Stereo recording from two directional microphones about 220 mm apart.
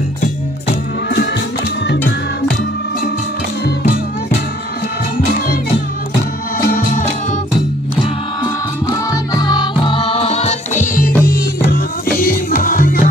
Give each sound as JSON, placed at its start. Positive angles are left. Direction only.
{"t": 6.7, "sound": "music", "side_deg": 35}
{"t": 8.9, "sound": "music", "side_deg": 15}